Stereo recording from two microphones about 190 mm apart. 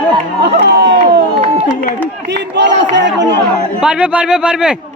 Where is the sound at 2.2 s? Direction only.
65° right (ahead or behind).